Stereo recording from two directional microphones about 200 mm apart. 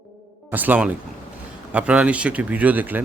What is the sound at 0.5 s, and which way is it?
A man's voice, 10° right (ahead or behind).